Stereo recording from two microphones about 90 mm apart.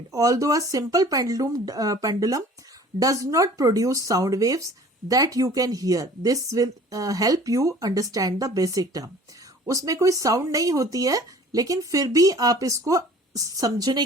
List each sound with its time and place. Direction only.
0.1 s speech: 40° right (ahead or behind)